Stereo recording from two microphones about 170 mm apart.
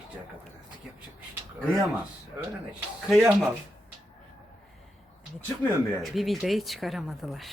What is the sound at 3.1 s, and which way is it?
Speech, centre (ahead or behind).